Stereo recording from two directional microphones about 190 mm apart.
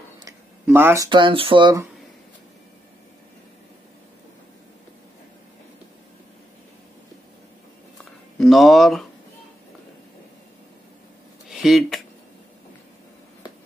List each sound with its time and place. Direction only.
0.7 s speech: 10° right (ahead or behind)
8.4 s speech: centre (ahead or behind)
11.4 s speech: centre (ahead or behind)